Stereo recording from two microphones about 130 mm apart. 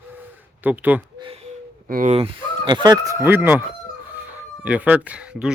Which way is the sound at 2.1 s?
40° right (ahead or behind).